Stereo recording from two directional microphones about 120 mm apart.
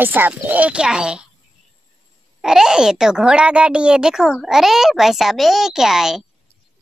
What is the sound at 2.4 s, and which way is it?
Speech, 5° right (ahead or behind).